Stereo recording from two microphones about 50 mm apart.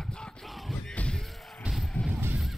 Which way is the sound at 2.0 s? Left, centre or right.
Left.